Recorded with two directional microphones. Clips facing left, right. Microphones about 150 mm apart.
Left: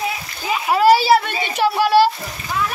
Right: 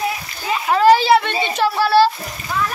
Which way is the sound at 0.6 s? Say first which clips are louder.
Right 1 dB; 10° left (ahead or behind).